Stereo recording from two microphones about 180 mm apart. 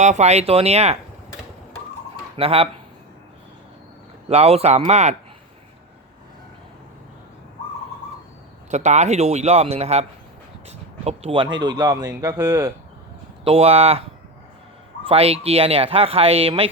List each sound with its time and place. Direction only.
0.0 s speech: 40° right (ahead or behind)
2.3 s speech: 30° right (ahead or behind)
4.3 s speech: 35° right (ahead or behind)
8.7 s speech: 40° right (ahead or behind); by 12.7 s 20° right (ahead or behind)
13.4 s speech: 30° right (ahead or behind)
15.0 s speech: 35° right (ahead or behind)